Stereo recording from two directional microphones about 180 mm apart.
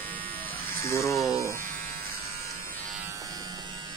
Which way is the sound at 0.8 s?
15° left (ahead or behind).